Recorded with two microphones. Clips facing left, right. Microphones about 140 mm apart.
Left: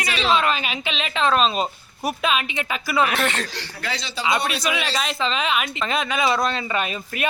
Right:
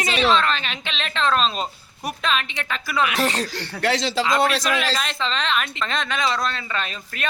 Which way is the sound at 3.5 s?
65° right (ahead or behind).